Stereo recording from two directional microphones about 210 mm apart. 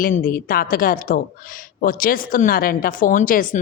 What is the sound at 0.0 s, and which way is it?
A woman's voice, 40° left (ahead or behind).